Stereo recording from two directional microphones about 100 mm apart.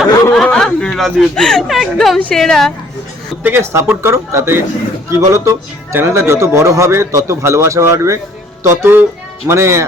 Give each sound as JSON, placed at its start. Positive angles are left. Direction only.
{"t": 0.4, "sound": "speech", "side_deg": 5}
{"t": 3.4, "sound": "speech", "side_deg": -25}